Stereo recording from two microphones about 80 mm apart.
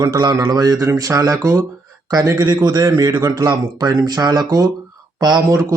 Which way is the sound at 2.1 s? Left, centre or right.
Right.